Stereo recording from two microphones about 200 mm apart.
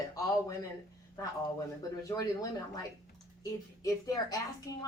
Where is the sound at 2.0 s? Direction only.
15° left (ahead or behind).